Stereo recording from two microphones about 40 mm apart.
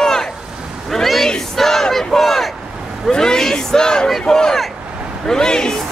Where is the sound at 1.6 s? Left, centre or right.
Centre.